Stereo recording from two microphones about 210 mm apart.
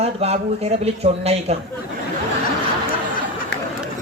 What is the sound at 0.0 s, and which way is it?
Speech, 30° right (ahead or behind).